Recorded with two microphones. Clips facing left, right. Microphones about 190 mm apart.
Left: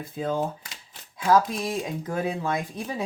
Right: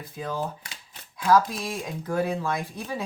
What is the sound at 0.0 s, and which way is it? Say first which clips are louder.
Speech: left 4 dB; 25° left (ahead or behind).